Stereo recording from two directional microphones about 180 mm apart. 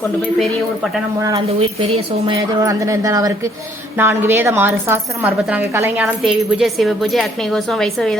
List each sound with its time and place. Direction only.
1.8 s a woman's voice: 30° right (ahead or behind); by 8.2 s centre (ahead or behind)